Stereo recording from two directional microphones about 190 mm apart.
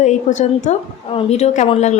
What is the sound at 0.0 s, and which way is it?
A woman's voice, 40° left (ahead or behind).